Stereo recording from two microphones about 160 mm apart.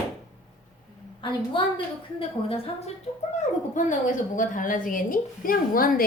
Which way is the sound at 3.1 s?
40° left (ahead or behind).